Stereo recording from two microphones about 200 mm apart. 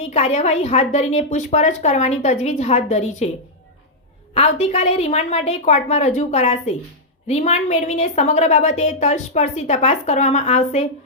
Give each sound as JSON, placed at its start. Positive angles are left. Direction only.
{"t": 0.1, "sound": "a woman's voice", "side_deg": 35}
{"t": 4.4, "sound": "a woman's voice", "side_deg": 30}